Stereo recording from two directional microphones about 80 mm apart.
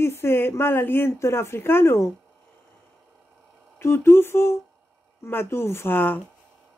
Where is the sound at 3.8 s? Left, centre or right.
Left.